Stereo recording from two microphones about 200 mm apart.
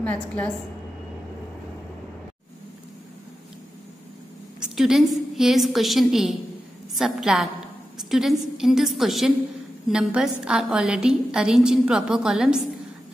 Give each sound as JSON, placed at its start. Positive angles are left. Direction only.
{"t": 0.0, "sound": "a woman's voice", "side_deg": 5}
{"t": 4.6, "sound": "a woman's voice", "side_deg": 0}